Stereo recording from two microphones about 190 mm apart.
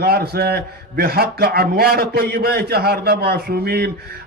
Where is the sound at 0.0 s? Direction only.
55° right (ahead or behind).